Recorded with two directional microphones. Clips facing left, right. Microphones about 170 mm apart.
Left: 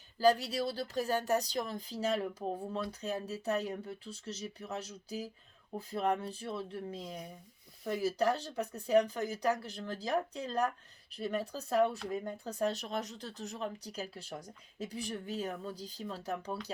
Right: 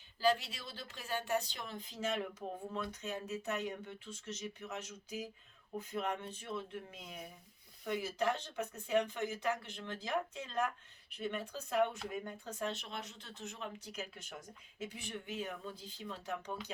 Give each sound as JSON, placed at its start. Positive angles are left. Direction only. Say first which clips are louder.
{"t": 0.2, "sound": "speech", "louder": "left 6 dB", "side_deg": 40}